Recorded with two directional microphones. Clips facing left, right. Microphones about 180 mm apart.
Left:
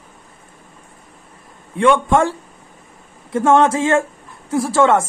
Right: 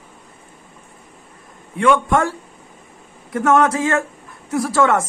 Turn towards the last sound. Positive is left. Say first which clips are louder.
# left 2 dB
turn(degrees=25)  # may be behind; listen again after turning